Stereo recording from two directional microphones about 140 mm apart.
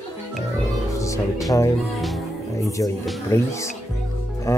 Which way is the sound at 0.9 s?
20° left (ahead or behind).